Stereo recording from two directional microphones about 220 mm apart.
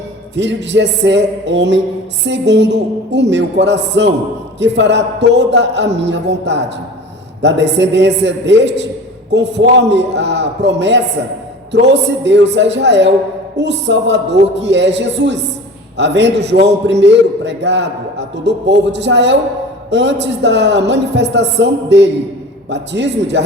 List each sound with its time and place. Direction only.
0.3 s a man's voice: 55° right (ahead or behind)